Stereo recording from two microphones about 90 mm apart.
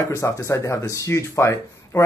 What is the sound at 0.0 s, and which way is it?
Speech, 35° left (ahead or behind).